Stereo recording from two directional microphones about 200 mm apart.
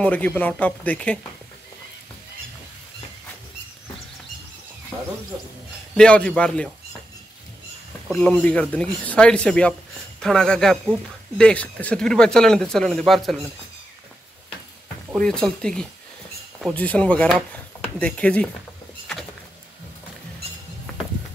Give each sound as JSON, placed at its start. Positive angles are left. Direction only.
{"t": 0.0, "sound": "speech", "side_deg": 10}
{"t": 5.9, "sound": "speech", "side_deg": 5}
{"t": 8.1, "sound": "speech", "side_deg": 5}
{"t": 15.1, "sound": "speech", "side_deg": 5}